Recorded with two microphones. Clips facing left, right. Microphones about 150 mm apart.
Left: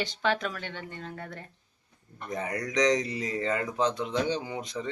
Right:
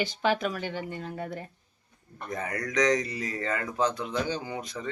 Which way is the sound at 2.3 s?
20° left (ahead or behind).